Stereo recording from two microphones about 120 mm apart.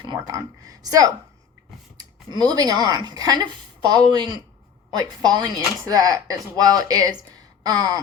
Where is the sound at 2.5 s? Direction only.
30° right (ahead or behind).